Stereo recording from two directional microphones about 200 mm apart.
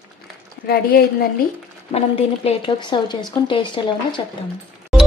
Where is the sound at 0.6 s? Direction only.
50° left (ahead or behind).